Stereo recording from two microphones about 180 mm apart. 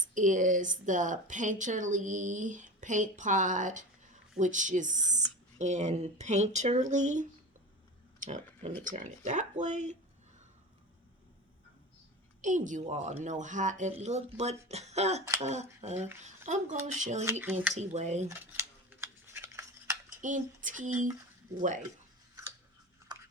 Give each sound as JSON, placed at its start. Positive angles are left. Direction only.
{"t": 0.0, "sound": "a woman's voice", "side_deg": -45}
{"t": 12.4, "sound": "speech", "side_deg": -45}
{"t": 17.4, "sound": "speech", "side_deg": -10}
{"t": 17.7, "sound": "speech", "side_deg": -40}
{"t": 18.3, "sound": "scissors", "side_deg": -15}
{"t": 20.2, "sound": "a woman's voice", "side_deg": -45}
{"t": 23.1, "sound": "a sound", "side_deg": -25}